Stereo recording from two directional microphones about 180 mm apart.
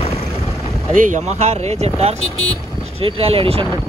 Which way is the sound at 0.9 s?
45° right (ahead or behind).